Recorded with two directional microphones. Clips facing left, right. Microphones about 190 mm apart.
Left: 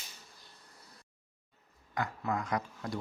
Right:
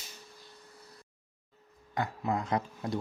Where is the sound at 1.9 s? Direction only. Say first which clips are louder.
Right 2 dB; 25° right (ahead or behind).